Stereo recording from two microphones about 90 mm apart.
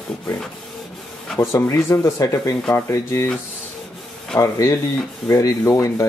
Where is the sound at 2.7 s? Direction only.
30° left (ahead or behind).